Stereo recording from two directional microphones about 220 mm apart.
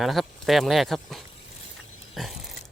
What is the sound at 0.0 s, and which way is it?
Speech, centre (ahead or behind).